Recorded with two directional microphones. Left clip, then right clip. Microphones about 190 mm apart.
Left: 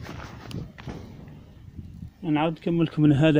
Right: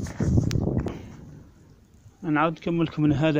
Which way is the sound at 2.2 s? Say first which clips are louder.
Right 1 dB; 25° left (ahead or behind).